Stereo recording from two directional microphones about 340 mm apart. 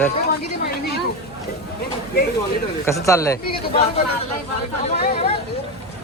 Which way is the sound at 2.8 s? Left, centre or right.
Centre.